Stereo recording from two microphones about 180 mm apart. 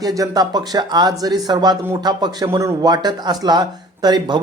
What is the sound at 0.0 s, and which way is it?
Speech, 20° right (ahead or behind).